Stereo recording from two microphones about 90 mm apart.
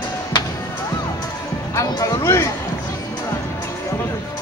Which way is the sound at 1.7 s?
40° left (ahead or behind).